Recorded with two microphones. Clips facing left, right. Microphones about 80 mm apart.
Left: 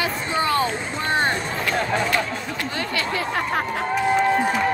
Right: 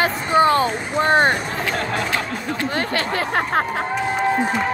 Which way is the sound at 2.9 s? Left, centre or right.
Right.